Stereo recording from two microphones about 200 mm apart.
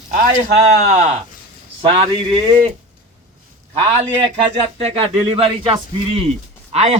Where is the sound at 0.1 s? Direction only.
40° right (ahead or behind).